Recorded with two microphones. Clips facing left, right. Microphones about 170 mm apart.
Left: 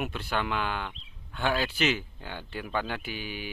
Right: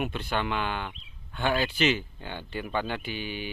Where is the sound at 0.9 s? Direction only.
10° right (ahead or behind).